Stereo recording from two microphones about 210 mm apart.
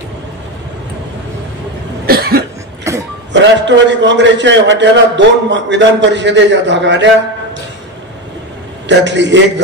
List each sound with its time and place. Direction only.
2.0 s cough: 45° right (ahead or behind)
2.9 s a sound: 15° right (ahead or behind)
3.3 s a man's voice: 55° right (ahead or behind)
8.8 s a man's voice: 60° right (ahead or behind)